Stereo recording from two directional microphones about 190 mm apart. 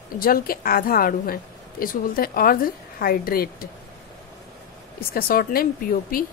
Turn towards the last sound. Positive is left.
turn(degrees=50)  # may be behind; listen again after turning